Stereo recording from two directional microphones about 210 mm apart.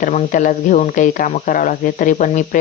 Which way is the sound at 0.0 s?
40° left (ahead or behind).